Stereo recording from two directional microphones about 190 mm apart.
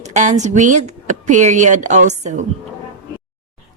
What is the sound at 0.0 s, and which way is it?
A woman's voice, 40° right (ahead or behind).